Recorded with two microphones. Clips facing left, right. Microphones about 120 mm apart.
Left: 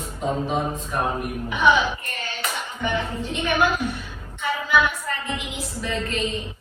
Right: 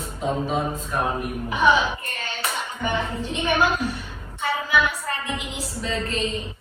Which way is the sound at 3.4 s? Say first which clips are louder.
Even; 35° right (ahead or behind).